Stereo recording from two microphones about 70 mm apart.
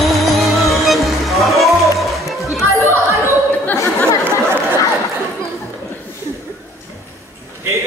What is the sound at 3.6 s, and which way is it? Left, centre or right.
Chatter, left.